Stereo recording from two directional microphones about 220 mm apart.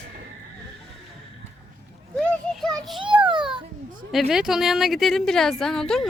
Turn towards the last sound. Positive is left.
turn(degrees=0)  # may be behind; listen again after turning